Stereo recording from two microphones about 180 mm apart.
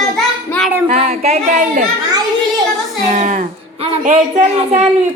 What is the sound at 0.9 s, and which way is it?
A woman's voice, 35° right (ahead or behind).